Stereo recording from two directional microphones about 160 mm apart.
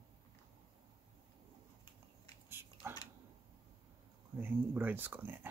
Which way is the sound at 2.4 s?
15° right (ahead or behind).